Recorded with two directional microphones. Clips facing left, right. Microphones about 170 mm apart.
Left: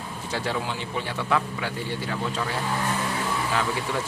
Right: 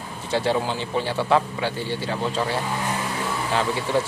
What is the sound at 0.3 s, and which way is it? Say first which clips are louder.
A man's voice: right 6 dB; 30° right (ahead or behind).